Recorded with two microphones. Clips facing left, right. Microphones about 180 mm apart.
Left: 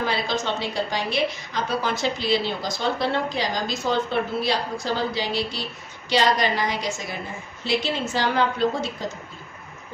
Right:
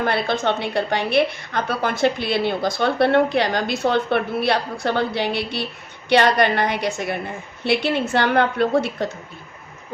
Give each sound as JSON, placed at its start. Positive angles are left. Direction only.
{"t": 0.0, "sound": "a woman's voice", "side_deg": -60}